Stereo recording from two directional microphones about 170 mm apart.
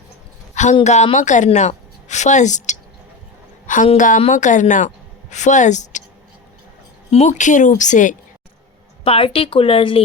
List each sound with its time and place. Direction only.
0.5 s a sound: 45° left (ahead or behind)
0.9 s a woman's voice: 40° left (ahead or behind)
3.9 s a woman's voice: 50° left (ahead or behind)
7.1 s a woman's voice: 40° left (ahead or behind)
9.0 s speech: 35° left (ahead or behind)